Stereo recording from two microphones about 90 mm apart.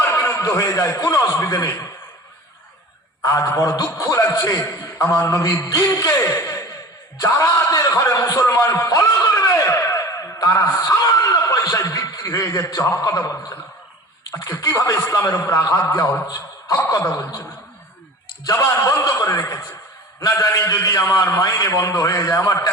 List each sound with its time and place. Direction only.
0.0 s a man's voice: 25° left (ahead or behind)
3.2 s a man's voice: 35° left (ahead or behind)
14.6 s a man's voice: 40° left (ahead or behind)
16.2 s a man's voice: 45° left (ahead or behind)
17.0 s a man's voice: 25° left (ahead or behind)
18.5 s a man's voice: 35° left (ahead or behind)